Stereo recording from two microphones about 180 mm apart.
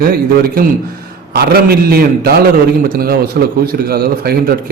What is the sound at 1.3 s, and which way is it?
Speech, 55° right (ahead or behind).